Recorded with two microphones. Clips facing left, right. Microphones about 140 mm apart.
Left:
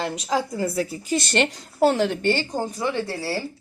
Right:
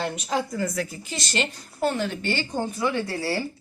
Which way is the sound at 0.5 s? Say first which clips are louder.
Left 3 dB; 30° left (ahead or behind).